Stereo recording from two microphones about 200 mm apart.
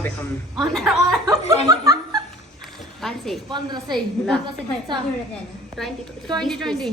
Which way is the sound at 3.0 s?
Centre (ahead or behind).